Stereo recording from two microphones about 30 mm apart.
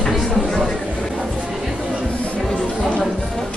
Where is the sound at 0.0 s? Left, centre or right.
Centre.